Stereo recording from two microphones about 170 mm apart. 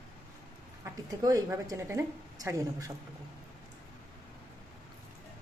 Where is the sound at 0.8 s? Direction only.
20° right (ahead or behind).